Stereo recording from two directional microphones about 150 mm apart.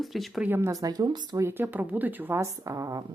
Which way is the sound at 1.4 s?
15° right (ahead or behind).